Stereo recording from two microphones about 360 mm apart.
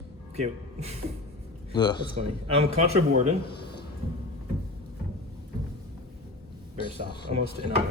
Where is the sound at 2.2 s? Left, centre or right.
Centre.